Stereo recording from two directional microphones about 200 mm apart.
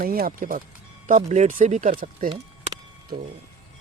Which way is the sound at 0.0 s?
45° right (ahead or behind).